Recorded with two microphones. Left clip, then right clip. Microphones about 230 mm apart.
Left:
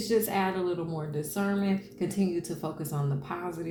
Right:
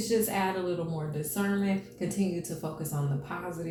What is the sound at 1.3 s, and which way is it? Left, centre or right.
Speech, left.